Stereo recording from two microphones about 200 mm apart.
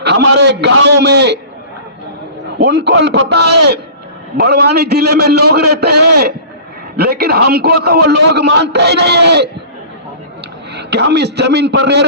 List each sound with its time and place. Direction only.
0.0 s a man's voice: 55° right (ahead or behind)
2.6 s a man's voice: 55° right (ahead or behind)
10.8 s a man's voice: 55° right (ahead or behind)